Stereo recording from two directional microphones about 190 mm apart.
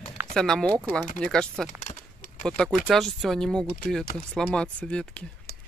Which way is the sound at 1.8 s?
40° left (ahead or behind).